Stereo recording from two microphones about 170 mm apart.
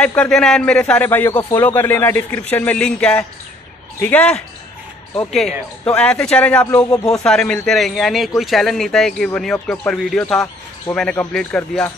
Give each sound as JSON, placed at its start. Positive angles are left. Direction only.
{"t": 0.0, "sound": "a man's voice", "side_deg": 5}